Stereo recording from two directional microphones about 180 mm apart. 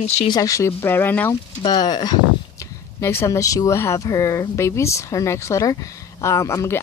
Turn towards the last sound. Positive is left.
turn(degrees=15)  # may be behind; listen again after turning